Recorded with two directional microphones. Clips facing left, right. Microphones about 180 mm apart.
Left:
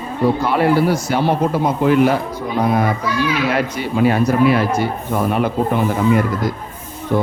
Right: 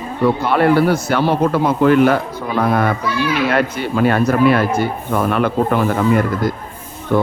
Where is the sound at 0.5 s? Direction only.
60° right (ahead or behind).